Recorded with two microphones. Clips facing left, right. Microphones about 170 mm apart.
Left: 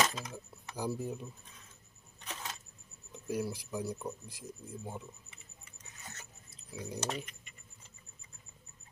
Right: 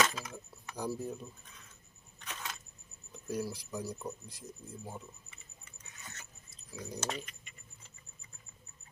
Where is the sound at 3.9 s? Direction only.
10° left (ahead or behind).